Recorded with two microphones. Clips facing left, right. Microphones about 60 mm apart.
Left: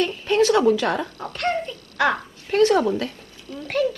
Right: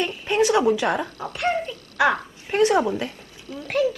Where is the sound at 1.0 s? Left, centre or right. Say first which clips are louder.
Even; right.